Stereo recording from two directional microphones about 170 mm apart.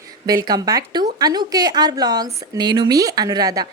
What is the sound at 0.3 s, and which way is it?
A woman's voice, 20° right (ahead or behind).